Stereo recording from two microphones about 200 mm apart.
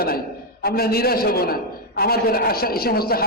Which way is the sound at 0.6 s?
50° left (ahead or behind).